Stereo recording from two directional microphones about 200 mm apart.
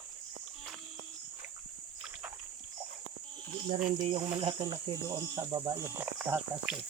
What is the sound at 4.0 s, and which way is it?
Speech, 25° right (ahead or behind).